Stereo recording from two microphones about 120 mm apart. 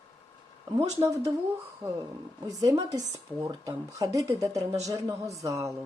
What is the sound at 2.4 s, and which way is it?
Speech, 30° right (ahead or behind).